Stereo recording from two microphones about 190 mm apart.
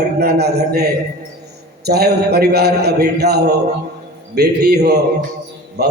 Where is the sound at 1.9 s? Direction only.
55° right (ahead or behind).